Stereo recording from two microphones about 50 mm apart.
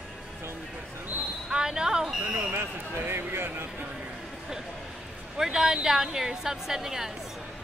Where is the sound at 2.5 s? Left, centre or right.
Right.